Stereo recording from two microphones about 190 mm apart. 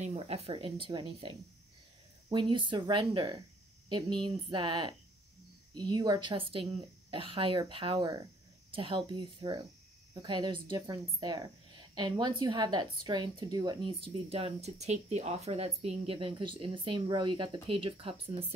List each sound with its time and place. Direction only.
0.0 s speech: 35° right (ahead or behind)